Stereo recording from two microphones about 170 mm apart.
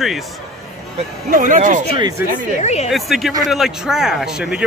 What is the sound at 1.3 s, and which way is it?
Speech, 50° right (ahead or behind).